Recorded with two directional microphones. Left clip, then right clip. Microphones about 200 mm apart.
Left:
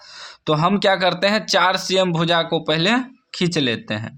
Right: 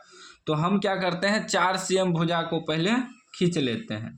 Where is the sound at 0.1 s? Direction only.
35° left (ahead or behind).